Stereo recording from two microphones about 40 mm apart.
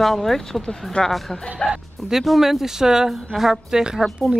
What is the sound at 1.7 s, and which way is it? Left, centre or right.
Speech, centre.